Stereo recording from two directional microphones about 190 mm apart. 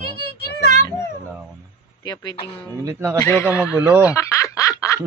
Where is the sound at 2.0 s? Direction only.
20° left (ahead or behind).